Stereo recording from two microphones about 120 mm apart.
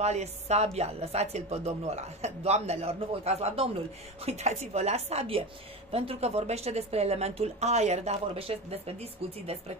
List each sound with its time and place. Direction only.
0.0 s speech: 65° right (ahead or behind)